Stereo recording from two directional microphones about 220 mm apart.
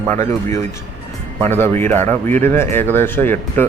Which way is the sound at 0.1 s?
35° right (ahead or behind).